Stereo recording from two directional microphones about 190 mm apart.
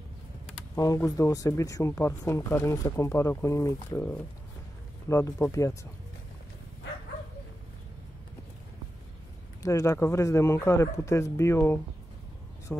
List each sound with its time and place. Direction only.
0.7 s speech: 20° left (ahead or behind)
9.6 s speech: 15° left (ahead or behind)